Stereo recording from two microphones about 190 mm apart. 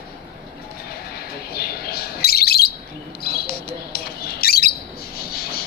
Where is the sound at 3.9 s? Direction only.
55° left (ahead or behind).